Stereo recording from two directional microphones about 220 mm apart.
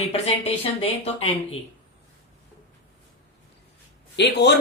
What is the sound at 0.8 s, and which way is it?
Speech, 25° left (ahead or behind).